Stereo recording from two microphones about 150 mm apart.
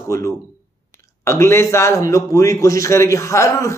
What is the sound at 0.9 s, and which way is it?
Speech, 20° left (ahead or behind).